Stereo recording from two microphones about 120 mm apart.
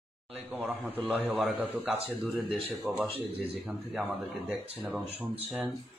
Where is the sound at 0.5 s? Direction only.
15° right (ahead or behind).